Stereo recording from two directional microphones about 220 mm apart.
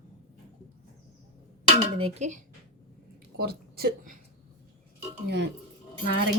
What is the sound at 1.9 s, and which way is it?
Speech, 30° right (ahead or behind).